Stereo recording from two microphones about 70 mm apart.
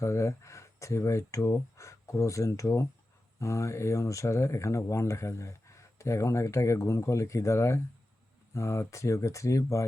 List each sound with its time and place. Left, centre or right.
0.0 s speech: left